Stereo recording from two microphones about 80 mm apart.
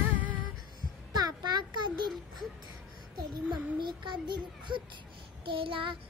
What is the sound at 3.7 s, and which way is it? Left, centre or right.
Child singing, right.